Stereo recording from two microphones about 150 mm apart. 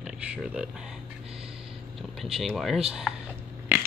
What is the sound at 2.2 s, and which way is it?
Speech, centre (ahead or behind).